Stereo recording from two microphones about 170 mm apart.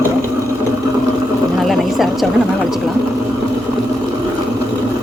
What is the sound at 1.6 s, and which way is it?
Vehicle, centre (ahead or behind).